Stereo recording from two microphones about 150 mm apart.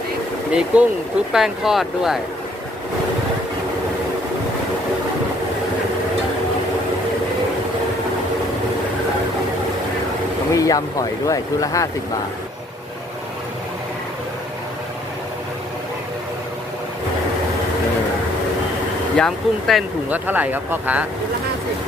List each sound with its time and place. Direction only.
0.5 s speech: 10° right (ahead or behind)
10.5 s speech: 25° left (ahead or behind)
19.1 s speech: 5° left (ahead or behind)
20.1 s speech: 10° right (ahead or behind)